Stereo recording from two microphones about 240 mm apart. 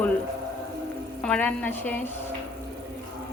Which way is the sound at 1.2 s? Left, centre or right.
Centre.